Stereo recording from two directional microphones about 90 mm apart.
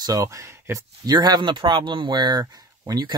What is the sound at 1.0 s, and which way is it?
Speech, 50° right (ahead or behind).